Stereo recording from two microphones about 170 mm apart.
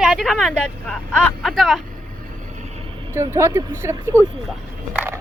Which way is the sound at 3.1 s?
15° right (ahead or behind).